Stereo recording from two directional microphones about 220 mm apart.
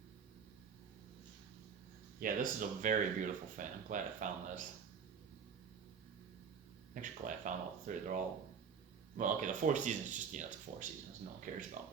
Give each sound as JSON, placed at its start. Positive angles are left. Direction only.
{"t": 2.2, "sound": "speech", "side_deg": -40}
{"t": 6.9, "sound": "speech", "side_deg": -35}